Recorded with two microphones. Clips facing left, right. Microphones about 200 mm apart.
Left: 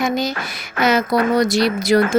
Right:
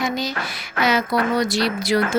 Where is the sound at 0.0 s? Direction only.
50° left (ahead or behind).